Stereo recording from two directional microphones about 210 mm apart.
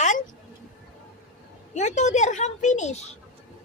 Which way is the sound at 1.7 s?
35° left (ahead or behind).